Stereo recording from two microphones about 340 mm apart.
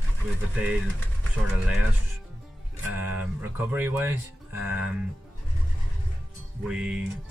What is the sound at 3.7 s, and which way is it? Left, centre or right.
Speech, centre.